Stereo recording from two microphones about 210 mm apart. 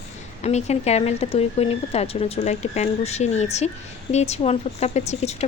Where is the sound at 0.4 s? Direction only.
30° left (ahead or behind).